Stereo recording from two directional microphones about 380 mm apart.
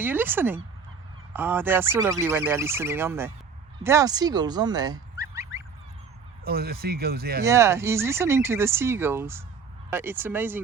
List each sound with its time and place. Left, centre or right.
0.0 s speech: centre
3.8 s fowl: centre
6.4 s speech: right
7.4 s speech: centre